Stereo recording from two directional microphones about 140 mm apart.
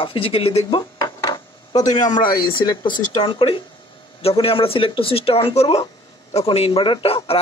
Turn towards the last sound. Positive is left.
turn(degrees=45)  # may be behind; listen again after turning